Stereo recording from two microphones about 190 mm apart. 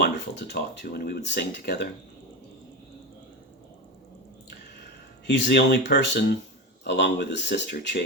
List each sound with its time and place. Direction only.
0.0 s speech: 60° left (ahead or behind)
5.2 s speech: 65° left (ahead or behind)